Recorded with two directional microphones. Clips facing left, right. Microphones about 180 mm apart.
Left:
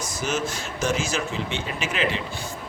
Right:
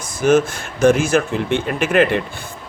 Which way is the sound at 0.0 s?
55° right (ahead or behind).